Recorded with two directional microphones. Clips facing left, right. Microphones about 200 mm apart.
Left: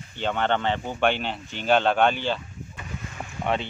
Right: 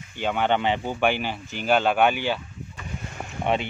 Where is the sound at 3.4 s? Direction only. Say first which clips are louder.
Right 2 dB; 20° right (ahead or behind).